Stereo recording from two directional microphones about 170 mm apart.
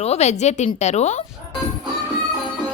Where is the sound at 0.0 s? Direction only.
40° left (ahead or behind).